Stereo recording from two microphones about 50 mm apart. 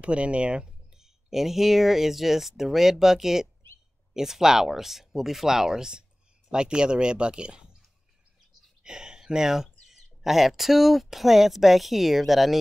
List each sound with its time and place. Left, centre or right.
0.0 s speech: right
0.9 s speech: centre
8.8 s speech: centre